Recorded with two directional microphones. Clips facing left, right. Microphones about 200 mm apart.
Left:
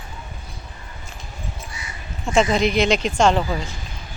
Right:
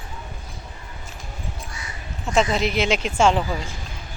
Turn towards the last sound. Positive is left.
turn(degrees=-5)  # may be behind; listen again after turning